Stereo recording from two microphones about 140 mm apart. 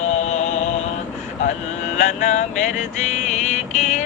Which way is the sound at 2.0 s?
60° left (ahead or behind).